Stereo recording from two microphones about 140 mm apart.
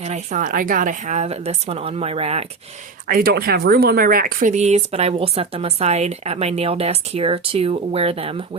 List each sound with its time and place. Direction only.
0.0 s speech: 55° right (ahead or behind)
3.1 s speech: 90° right; by 8.4 s 45° right (ahead or behind)